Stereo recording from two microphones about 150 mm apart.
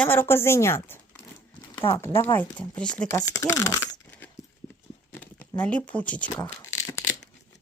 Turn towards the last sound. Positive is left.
turn(degrees=20)  # may be behind; listen again after turning